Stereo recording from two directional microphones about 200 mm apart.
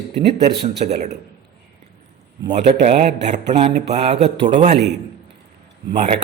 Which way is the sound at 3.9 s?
35° right (ahead or behind).